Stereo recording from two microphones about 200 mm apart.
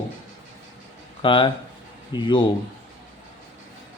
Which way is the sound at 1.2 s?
25° left (ahead or behind).